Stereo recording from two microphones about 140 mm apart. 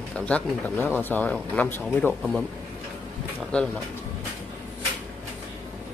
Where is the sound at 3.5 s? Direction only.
5° left (ahead or behind).